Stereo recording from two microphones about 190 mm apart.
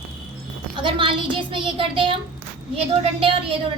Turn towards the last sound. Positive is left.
turn(degrees=-30)  # may be behind; listen again after turning